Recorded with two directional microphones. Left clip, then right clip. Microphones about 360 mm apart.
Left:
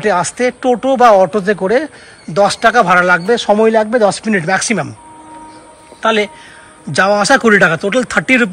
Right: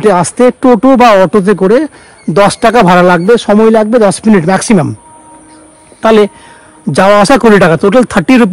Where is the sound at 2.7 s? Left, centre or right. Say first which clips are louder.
Right 4 dB; centre.